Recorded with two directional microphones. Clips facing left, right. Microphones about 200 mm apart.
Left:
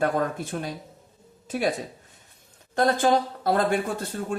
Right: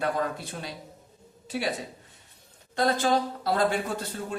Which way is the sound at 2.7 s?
50° left (ahead or behind).